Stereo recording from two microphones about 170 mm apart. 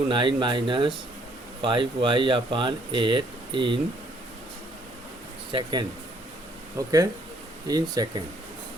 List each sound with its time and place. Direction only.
0.1 s speech: 30° right (ahead or behind)
5.5 s speech: 30° right (ahead or behind)